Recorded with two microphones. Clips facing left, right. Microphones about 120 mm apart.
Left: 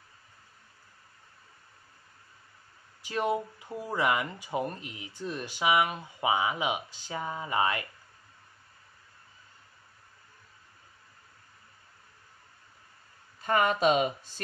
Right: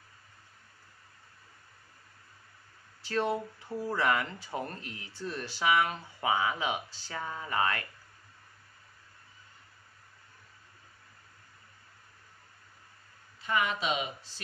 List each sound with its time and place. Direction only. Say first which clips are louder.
3.0 s speech: left 1 dB; 15° left (ahead or behind)
13.4 s speech: left 6 dB; 45° left (ahead or behind)